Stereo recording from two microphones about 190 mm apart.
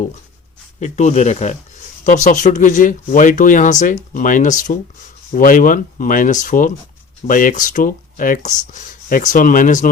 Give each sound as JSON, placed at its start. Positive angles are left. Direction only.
{"t": 0.8, "sound": "speech", "side_deg": 40}